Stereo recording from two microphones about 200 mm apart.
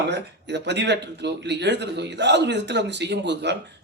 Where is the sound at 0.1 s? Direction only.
60° right (ahead or behind).